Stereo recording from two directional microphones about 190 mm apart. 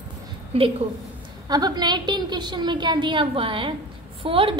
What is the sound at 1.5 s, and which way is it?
A woman's voice, 20° right (ahead or behind).